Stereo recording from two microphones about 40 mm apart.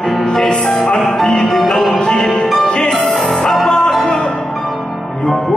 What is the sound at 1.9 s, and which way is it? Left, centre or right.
Music, centre.